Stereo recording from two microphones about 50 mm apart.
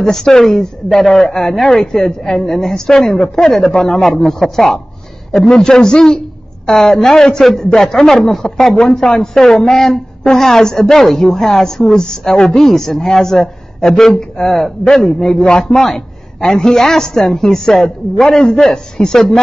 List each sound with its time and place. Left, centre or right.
0.0 s speech: centre